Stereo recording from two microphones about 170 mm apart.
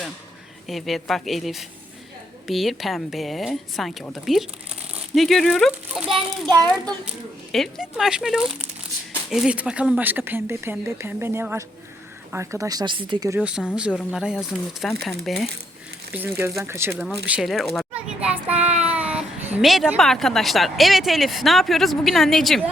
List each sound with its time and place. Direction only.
0.7 s speech: centre (ahead or behind); by 13.4 s 20° right (ahead or behind)
13.9 s speech: centre (ahead or behind)
16.1 s speech: 15° right (ahead or behind)
17.2 s a sound: 5° right (ahead or behind)
18.9 s speech: 5° right (ahead or behind)